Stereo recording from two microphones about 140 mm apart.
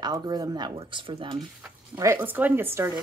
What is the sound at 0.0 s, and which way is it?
Speech, 30° right (ahead or behind).